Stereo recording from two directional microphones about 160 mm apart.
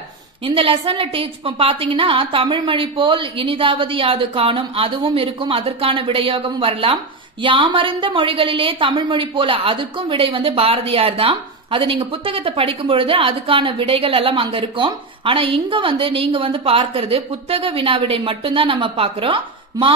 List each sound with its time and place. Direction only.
0.5 s a woman's voice: 35° right (ahead or behind)